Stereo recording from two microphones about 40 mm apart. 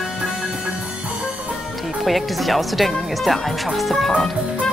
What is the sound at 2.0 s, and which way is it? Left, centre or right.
Speech, centre.